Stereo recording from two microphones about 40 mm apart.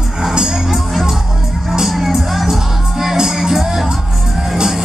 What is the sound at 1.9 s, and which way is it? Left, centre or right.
Music, centre.